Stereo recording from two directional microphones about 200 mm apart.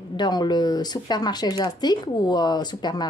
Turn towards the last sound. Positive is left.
turn(degrees=20)  # may be behind; listen again after turning